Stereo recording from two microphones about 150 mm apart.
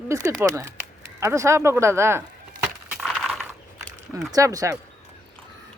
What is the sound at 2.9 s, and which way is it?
Coin, centre (ahead or behind).